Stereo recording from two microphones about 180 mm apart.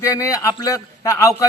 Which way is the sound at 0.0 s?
15° left (ahead or behind).